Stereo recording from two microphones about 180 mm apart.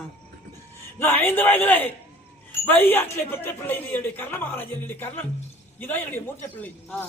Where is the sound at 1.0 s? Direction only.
10° left (ahead or behind).